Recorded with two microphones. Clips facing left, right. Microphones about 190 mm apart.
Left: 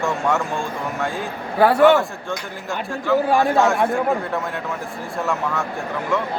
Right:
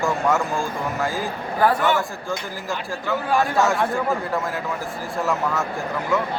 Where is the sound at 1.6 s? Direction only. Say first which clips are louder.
Left 6 dB; 70° left (ahead or behind).